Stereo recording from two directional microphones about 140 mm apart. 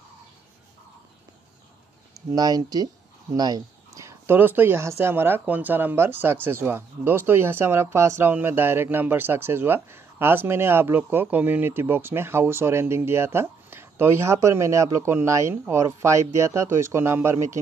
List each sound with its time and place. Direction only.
2.3 s speech: 25° right (ahead or behind)